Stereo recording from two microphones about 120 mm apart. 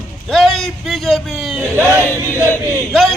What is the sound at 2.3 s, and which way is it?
Choir, 20° left (ahead or behind).